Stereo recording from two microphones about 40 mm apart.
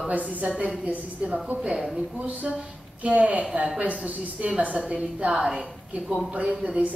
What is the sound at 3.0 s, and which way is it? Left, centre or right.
A woman's voice, right.